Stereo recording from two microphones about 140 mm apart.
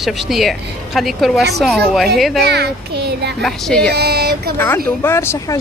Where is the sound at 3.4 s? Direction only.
5° left (ahead or behind).